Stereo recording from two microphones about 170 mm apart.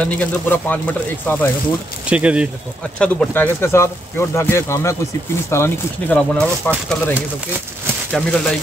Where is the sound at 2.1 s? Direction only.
5° right (ahead or behind).